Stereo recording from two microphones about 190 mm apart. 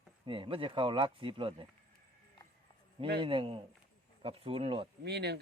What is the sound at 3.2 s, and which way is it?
Speech, 30° right (ahead or behind).